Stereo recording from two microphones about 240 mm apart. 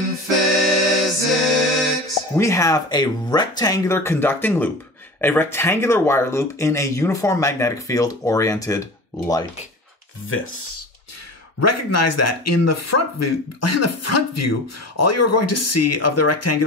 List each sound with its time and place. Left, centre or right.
0.4 s music: centre
2.4 s speech: centre
11.6 s speech: left